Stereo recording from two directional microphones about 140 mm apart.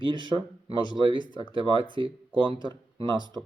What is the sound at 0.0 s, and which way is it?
Speech, 35° right (ahead or behind).